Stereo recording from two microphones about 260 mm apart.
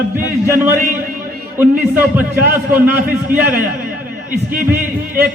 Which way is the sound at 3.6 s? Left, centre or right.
Right.